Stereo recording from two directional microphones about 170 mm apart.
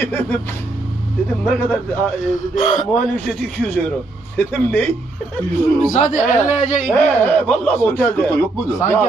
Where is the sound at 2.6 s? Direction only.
50° left (ahead or behind).